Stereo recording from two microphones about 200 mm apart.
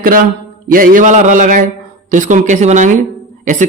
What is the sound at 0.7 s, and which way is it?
Speech, 45° right (ahead or behind).